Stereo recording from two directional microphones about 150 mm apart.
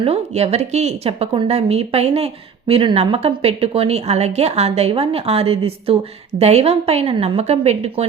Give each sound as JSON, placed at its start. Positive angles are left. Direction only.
{"t": 0.0, "sound": "a woman's voice", "side_deg": -40}